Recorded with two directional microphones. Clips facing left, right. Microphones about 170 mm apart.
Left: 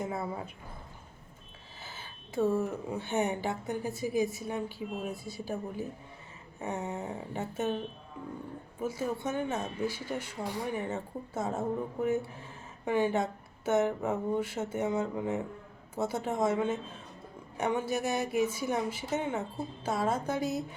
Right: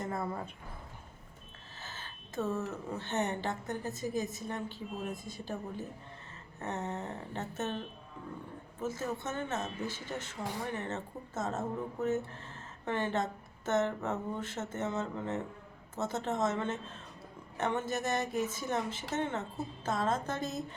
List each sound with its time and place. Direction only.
0.0 s speech: 5° left (ahead or behind)
1.8 s speech: 10° left (ahead or behind)
8.8 s speech: 10° left (ahead or behind)